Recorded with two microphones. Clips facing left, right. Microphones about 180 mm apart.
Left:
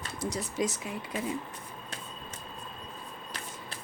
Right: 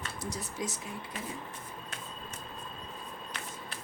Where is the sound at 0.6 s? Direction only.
80° left.